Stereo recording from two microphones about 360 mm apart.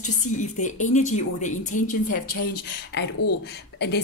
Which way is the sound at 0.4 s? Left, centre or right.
Left.